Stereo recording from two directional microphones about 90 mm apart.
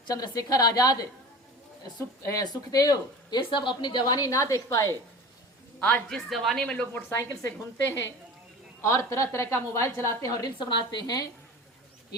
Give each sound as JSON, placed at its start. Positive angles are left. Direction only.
{"t": 0.1, "sound": "speech", "side_deg": 40}
{"t": 2.2, "sound": "speech", "side_deg": 45}
{"t": 5.8, "sound": "a man's voice", "side_deg": 15}
{"t": 6.1, "sound": "a woman's voice", "side_deg": 0}
{"t": 7.1, "sound": "a woman's voice", "side_deg": 35}
{"t": 10.6, "sound": "a woman's voice", "side_deg": 65}